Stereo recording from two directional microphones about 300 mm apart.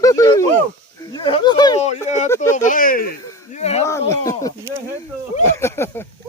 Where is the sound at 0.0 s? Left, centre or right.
Centre.